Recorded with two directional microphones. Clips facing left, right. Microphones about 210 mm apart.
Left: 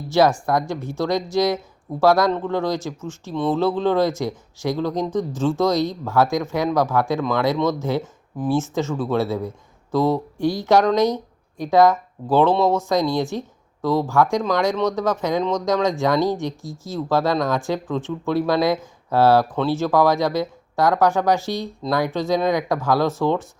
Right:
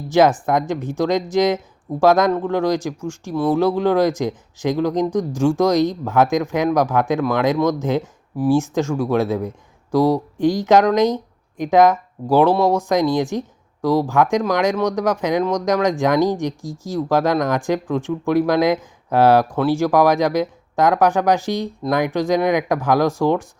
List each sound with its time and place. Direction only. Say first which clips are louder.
0.1 s speech: right 2 dB; 20° right (ahead or behind)